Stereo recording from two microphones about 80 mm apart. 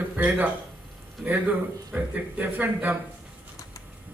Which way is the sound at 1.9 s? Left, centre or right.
Right.